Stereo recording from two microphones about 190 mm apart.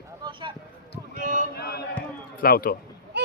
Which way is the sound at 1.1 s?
45° right (ahead or behind).